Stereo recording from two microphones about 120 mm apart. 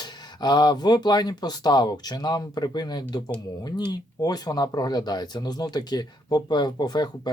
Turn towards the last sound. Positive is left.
turn(degrees=35)  # may be behind; listen again after turning